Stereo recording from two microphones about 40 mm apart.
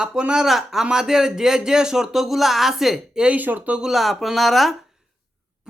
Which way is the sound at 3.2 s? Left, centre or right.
Right.